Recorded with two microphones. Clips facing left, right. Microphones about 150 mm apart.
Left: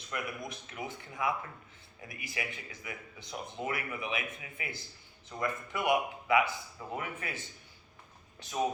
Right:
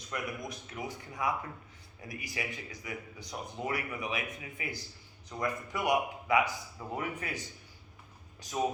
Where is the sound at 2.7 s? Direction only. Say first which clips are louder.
Right 3 dB; 40° right (ahead or behind).